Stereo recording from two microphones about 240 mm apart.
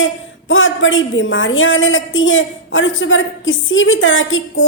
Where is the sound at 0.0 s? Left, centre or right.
Left.